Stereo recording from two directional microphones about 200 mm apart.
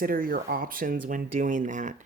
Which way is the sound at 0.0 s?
45° right (ahead or behind).